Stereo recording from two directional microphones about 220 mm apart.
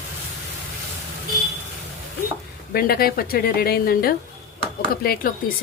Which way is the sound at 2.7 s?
45° left (ahead or behind).